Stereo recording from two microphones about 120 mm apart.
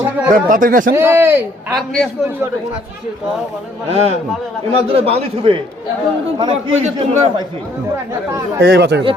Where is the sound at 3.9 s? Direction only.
60° right (ahead or behind).